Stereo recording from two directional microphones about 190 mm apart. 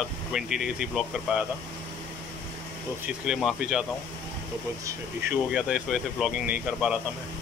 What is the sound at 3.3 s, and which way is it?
Speech, centre (ahead or behind).